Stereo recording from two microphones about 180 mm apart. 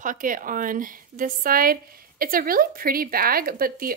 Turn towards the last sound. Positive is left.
turn(degrees=-55)  # may be behind; listen again after turning